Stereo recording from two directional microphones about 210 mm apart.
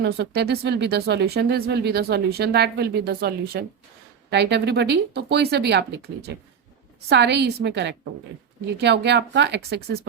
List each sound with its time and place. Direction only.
0.0 s a woman's voice: 55° right (ahead or behind)